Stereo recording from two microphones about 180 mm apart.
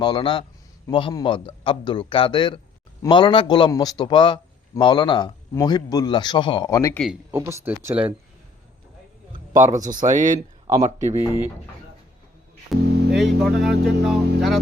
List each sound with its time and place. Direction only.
0.0 s a man's voice: 25° left (ahead or behind)
7.3 s speech: 15° right (ahead or behind)
9.5 s speech: 15° right (ahead or behind)
9.7 s speech: 45° right (ahead or behind)
10.7 s speech: 15° right (ahead or behind)
12.7 s music: centre (ahead or behind)
13.4 s speech: centre (ahead or behind)